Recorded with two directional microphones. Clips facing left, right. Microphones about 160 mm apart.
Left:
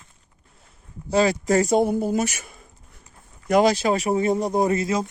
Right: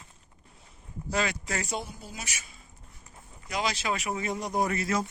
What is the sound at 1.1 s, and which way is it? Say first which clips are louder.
Speech: left 12 dB; 35° left (ahead or behind).